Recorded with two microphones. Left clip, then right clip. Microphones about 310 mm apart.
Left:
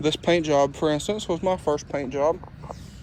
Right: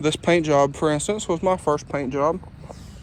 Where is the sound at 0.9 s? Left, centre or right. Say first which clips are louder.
Right 2 dB; right.